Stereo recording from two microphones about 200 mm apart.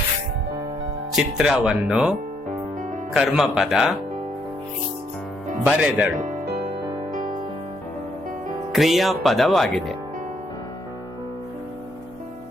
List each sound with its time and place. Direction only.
1.1 s speech: 5° right (ahead or behind)
5.6 s speech: 5° right (ahead or behind)
7.2 s music: 45° right (ahead or behind)
8.7 s speech: centre (ahead or behind)